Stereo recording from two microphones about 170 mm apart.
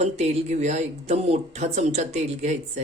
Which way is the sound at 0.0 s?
40° right (ahead or behind).